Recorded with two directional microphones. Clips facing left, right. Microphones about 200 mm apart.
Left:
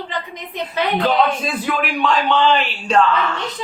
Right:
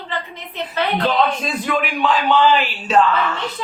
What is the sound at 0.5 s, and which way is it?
Speech, 15° left (ahead or behind).